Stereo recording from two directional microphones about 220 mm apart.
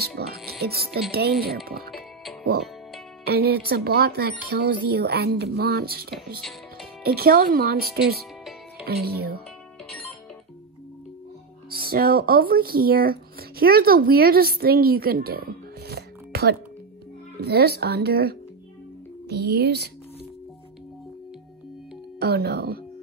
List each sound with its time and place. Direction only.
0.0 s speech: 45° right (ahead or behind)
3.3 s speech: 45° right (ahead or behind)
11.7 s speech: 45° right (ahead or behind)
22.2 s speech: 45° right (ahead or behind)